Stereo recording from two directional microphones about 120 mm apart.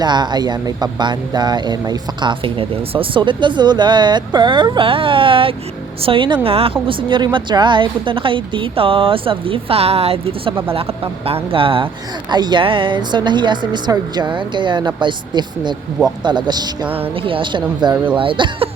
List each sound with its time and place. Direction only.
0.0 s a woman's voice: 35° right (ahead or behind)
2.4 s a woman's voice: 50° right (ahead or behind)
16.8 s speech: 15° right (ahead or behind)
17.2 s a woman's voice: 45° right (ahead or behind)